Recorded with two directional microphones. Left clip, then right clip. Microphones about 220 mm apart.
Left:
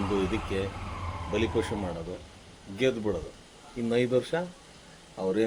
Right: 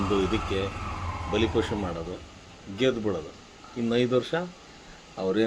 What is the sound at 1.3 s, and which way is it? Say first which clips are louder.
Speech: right 3 dB; 5° right (ahead or behind).